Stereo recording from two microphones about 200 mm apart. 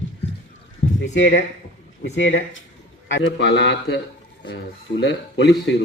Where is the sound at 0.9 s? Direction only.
65° left (ahead or behind).